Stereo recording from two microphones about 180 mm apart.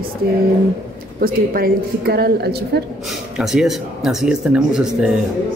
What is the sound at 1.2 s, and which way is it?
A woman's voice, 55° right (ahead or behind).